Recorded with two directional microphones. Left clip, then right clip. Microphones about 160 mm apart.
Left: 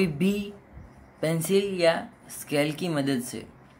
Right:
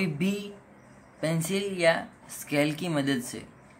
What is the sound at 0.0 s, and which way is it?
Speech, 25° left (ahead or behind).